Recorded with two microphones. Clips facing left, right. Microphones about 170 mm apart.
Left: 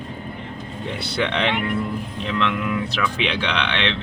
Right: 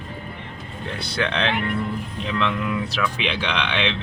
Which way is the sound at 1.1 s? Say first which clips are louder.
Left 1 dB; centre (ahead or behind).